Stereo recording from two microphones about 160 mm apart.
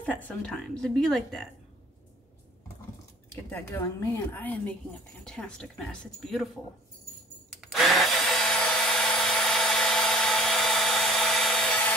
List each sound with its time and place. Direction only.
0.0 s a woman's voice: 10° left (ahead or behind)
3.4 s a woman's voice: 15° left (ahead or behind)
7.6 s drill: centre (ahead or behind)